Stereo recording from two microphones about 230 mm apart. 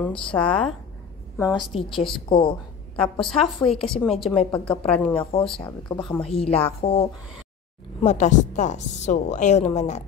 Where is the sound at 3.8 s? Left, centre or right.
Centre.